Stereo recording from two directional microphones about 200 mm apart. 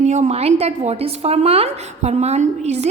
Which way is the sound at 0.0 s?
35° right (ahead or behind).